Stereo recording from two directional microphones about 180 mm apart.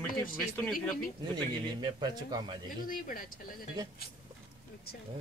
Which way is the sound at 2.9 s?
50° left (ahead or behind).